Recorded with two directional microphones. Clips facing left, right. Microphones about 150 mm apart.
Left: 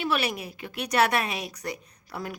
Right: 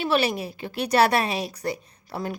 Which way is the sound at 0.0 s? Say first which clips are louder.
Right 5 dB; 30° right (ahead or behind).